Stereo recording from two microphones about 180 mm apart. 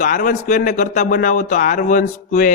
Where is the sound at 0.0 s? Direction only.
45° left (ahead or behind).